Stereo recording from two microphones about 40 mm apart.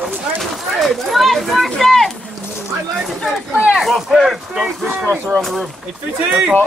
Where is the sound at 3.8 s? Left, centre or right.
Centre.